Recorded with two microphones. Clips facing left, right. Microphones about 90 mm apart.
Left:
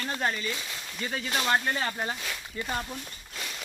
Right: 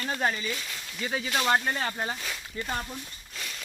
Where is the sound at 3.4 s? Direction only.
10° left (ahead or behind).